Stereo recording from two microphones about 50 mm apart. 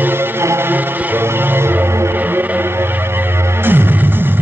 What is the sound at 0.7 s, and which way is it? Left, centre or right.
Music, right.